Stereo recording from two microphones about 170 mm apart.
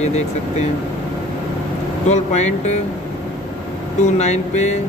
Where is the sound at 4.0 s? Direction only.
45° left (ahead or behind).